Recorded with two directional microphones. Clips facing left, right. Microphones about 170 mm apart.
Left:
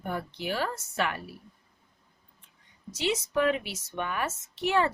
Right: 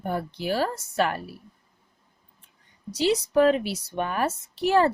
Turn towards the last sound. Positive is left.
turn(degrees=-35)  # may be behind; listen again after turning